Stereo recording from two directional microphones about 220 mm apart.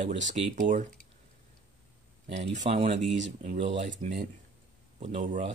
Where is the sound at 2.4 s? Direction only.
30° right (ahead or behind).